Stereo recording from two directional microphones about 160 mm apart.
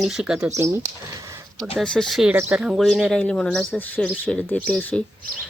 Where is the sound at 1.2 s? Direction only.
20° right (ahead or behind).